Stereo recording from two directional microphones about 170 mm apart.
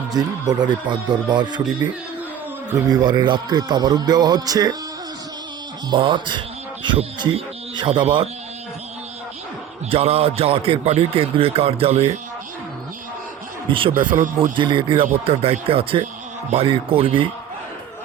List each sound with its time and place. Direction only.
0.1 s speech: 25° right (ahead or behind)
5.9 s speech: 30° right (ahead or behind)
9.9 s a man's voice: 35° right (ahead or behind)
13.7 s a man's voice: 30° right (ahead or behind)
14.1 s a man's voice: 20° right (ahead or behind)